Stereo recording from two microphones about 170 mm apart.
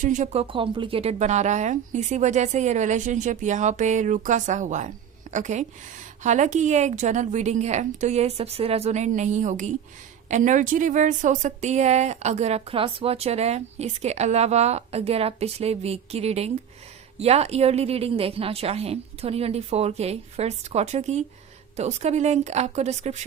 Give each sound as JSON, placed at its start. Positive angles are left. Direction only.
{"t": 0.0, "sound": "a woman's voice", "side_deg": -45}
{"t": 0.4, "sound": "a woman's voice", "side_deg": -30}